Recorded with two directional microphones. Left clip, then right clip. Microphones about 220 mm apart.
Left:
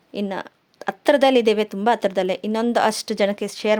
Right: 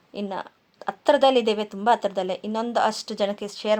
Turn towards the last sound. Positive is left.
turn(degrees=45)  # may be behind; listen again after turning